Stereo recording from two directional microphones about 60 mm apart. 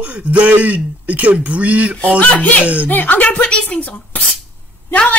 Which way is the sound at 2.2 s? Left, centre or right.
Left.